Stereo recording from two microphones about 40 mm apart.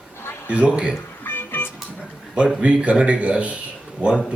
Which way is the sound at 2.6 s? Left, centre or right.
Right.